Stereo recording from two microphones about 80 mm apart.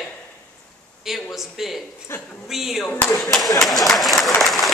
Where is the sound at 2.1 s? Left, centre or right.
Left.